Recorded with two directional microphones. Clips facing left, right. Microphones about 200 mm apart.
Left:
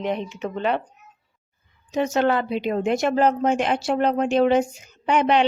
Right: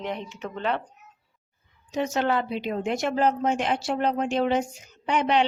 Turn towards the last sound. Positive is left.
turn(degrees=65)  # may be behind; listen again after turning